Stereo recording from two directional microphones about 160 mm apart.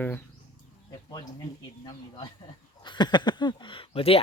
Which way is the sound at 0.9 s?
25° left (ahead or behind).